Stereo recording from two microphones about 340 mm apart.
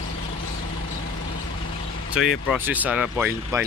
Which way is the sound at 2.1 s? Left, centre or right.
Centre.